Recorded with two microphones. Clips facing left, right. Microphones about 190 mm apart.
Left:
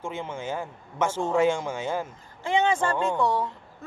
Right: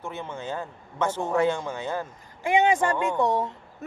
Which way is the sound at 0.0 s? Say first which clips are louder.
Left 1 dB; 10° left (ahead or behind).